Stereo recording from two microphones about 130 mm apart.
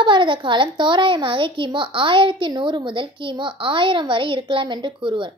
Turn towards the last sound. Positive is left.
turn(degrees=-40)  # may be behind; listen again after turning